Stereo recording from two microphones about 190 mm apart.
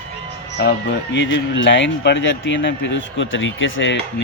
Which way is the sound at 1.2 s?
70° left (ahead or behind).